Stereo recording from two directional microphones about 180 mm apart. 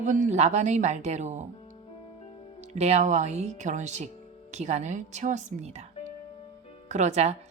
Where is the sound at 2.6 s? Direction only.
35° right (ahead or behind).